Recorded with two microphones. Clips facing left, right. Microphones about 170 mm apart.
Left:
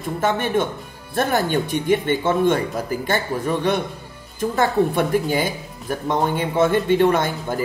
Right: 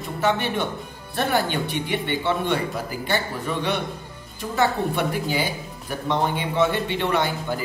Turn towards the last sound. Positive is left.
turn(degrees=45)  # may be behind; listen again after turning